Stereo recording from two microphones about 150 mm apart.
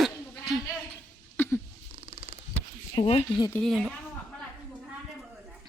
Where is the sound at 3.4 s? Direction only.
25° left (ahead or behind).